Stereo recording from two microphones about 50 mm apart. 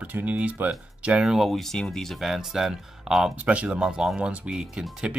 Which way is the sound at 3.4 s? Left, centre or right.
Right.